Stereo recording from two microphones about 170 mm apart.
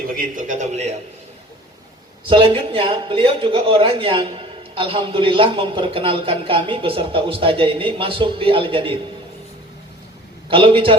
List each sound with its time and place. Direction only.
0.2 s a man's voice: 50° right (ahead or behind)
2.3 s a man's voice: 30° right (ahead or behind)
10.5 s a man's voice: 30° right (ahead or behind)